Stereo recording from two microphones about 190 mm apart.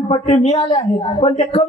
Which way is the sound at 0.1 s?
30° left (ahead or behind).